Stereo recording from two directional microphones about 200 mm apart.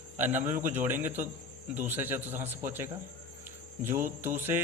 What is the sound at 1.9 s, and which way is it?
Speech, 10° right (ahead or behind).